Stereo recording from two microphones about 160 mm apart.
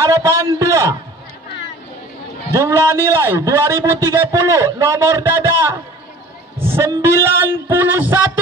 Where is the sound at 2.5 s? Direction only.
15° right (ahead or behind).